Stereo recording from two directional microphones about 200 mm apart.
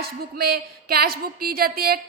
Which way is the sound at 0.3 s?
50° right (ahead or behind).